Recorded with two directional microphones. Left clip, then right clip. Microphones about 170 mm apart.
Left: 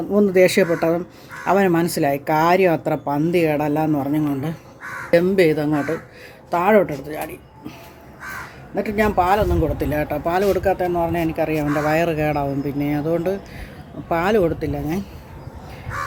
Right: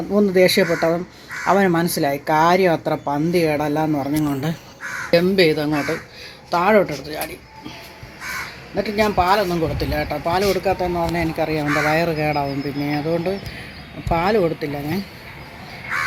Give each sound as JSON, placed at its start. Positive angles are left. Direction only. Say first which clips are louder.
{"t": 0.1, "sound": "speech", "louder": "even", "side_deg": 10}
{"t": 8.7, "sound": "speech", "louder": "even", "side_deg": 10}
{"t": 9.7, "sound": "speech", "louder": "left 1 dB", "side_deg": 30}